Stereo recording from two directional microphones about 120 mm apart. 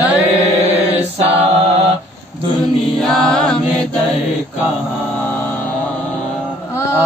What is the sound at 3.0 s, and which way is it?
Chant, 5° left (ahead or behind).